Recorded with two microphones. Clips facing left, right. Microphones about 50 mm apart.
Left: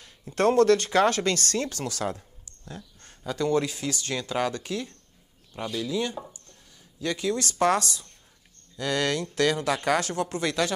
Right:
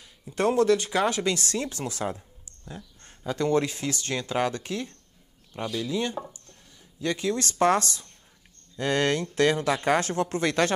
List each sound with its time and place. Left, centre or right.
0.4 s speech: centre
0.8 s speech: left
1.1 s speech: centre
3.3 s speech: right
5.5 s speech: centre; by 10.7 s right